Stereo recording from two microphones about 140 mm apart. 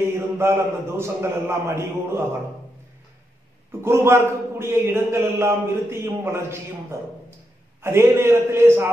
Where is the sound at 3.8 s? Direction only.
20° right (ahead or behind).